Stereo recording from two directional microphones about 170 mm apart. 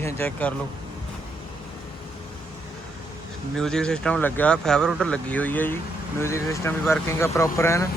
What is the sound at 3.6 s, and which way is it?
Speech, 5° left (ahead or behind).